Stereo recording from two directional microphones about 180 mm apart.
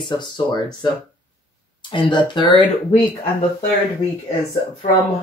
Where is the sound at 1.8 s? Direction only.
25° left (ahead or behind).